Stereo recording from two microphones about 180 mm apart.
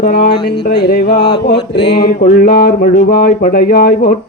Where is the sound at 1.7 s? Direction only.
70° left (ahead or behind).